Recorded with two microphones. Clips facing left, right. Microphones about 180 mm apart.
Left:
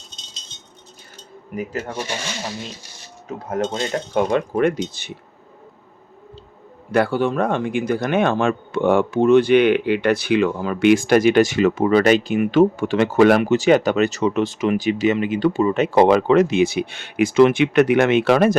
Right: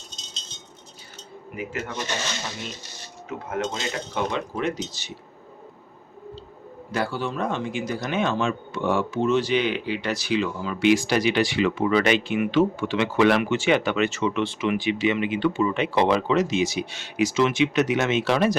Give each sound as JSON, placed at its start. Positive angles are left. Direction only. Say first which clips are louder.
{"t": 1.9, "sound": "speech", "louder": "left 3 dB", "side_deg": 10}
{"t": 3.2, "sound": "speech", "louder": "left 5 dB", "side_deg": 35}
{"t": 6.9, "sound": "speech", "louder": "left 9 dB", "side_deg": 60}